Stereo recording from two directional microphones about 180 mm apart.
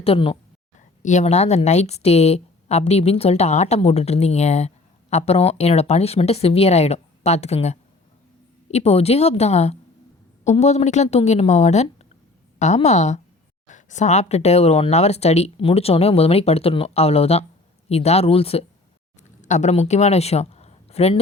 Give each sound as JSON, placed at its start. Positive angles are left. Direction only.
{"t": 0.0, "sound": "a woman's voice", "side_deg": 30}